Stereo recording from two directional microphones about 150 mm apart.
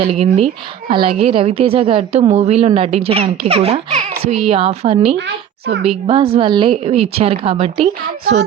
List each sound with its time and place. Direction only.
0.0 s a woman's voice: 40° right (ahead or behind)